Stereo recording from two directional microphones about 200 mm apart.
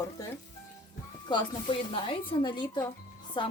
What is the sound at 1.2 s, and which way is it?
Speech, 25° left (ahead or behind).